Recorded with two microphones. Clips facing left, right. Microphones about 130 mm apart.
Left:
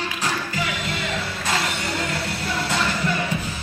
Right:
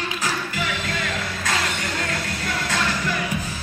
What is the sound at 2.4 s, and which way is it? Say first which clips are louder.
Music: left 1 dB; 30° left (ahead or behind).